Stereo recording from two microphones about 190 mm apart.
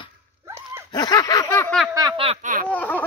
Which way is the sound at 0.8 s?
20° left (ahead or behind).